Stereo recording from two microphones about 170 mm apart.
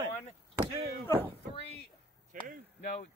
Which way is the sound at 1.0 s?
15° left (ahead or behind).